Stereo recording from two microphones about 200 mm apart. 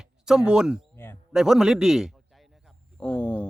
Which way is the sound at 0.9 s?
10° left (ahead or behind).